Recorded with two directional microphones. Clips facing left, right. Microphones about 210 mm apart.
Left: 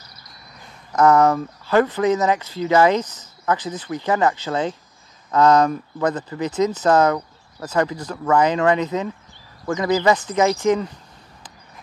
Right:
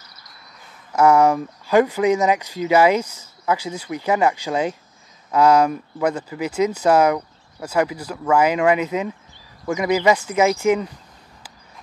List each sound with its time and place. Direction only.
0.9 s speech: 10° right (ahead or behind)